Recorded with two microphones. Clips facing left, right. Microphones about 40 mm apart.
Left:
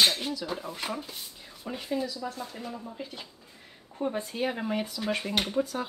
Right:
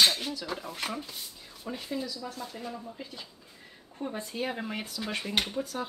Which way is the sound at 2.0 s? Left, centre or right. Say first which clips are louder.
Left 3 dB; left.